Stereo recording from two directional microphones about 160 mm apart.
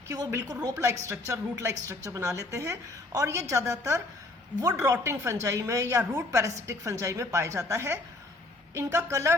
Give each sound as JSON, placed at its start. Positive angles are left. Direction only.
{"t": 0.1, "sound": "a woman's voice", "side_deg": -20}